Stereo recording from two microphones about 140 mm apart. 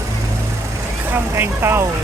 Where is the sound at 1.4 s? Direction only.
15° right (ahead or behind).